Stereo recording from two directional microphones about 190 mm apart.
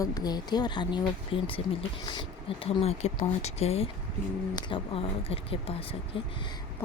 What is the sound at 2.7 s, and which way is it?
A woman's voice, 30° left (ahead or behind).